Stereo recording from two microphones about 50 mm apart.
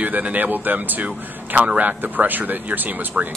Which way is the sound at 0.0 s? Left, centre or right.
Right.